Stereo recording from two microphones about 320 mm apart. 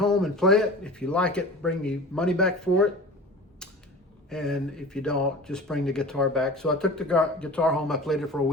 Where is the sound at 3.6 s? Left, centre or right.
Centre.